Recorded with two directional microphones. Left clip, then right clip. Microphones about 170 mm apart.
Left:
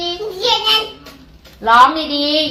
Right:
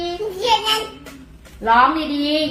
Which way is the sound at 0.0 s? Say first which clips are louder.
Left 3 dB; 20° right (ahead or behind).